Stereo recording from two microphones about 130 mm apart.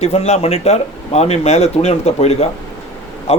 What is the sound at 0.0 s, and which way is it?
A man's voice, 55° left (ahead or behind).